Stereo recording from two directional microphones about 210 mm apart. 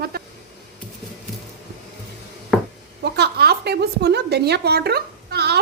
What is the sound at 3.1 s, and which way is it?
Speech, 50° right (ahead or behind).